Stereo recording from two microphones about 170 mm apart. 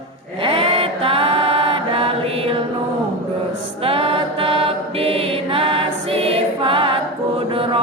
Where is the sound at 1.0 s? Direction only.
35° right (ahead or behind).